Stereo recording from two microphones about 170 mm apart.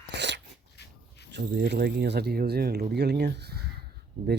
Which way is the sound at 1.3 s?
80° right.